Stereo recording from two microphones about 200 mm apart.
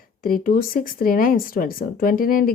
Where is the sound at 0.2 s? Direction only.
45° left (ahead or behind).